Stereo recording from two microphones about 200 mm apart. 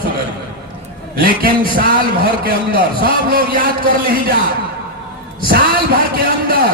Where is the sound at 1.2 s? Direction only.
45° right (ahead or behind).